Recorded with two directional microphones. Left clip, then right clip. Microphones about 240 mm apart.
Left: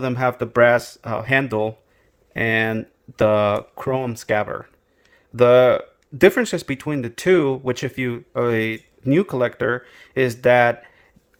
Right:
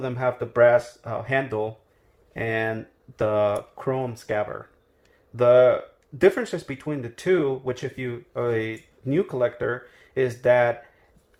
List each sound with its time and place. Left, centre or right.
0.0 s speech: left